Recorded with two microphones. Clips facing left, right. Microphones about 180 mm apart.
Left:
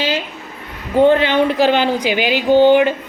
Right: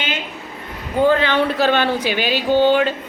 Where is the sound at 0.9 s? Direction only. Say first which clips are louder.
Left 4 dB; 25° left (ahead or behind).